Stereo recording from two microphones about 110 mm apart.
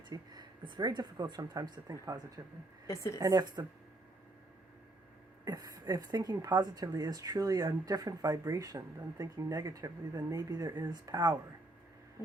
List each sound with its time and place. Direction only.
0.1 s a woman's voice: 40° right (ahead or behind)
2.8 s a woman's voice: 25° left (ahead or behind)
3.2 s a woman's voice: 35° right (ahead or behind)
5.5 s a woman's voice: 35° right (ahead or behind)